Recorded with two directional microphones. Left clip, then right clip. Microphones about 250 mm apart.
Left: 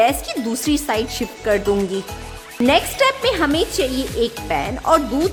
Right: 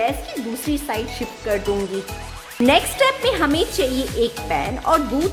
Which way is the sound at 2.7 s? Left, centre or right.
Centre.